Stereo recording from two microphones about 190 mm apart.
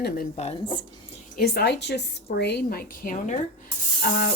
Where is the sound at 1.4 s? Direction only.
60° left (ahead or behind); by 3.4 s 45° left (ahead or behind).